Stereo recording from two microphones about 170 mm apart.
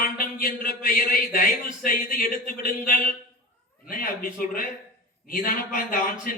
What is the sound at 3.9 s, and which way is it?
Speech, 55° left (ahead or behind).